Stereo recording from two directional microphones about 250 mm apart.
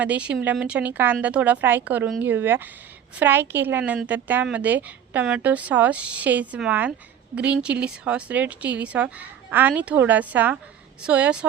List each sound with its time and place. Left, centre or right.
0.0 s a woman's voice: centre